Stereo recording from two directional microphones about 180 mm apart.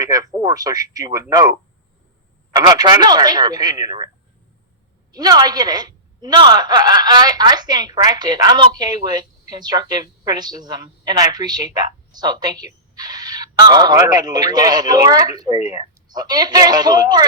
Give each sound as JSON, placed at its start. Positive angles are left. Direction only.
{"t": 0.0, "sound": "a woman's voice", "side_deg": -20}
{"t": 5.1, "sound": "a woman's voice", "side_deg": -20}